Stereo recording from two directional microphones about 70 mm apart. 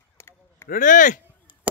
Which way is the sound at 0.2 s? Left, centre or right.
Left.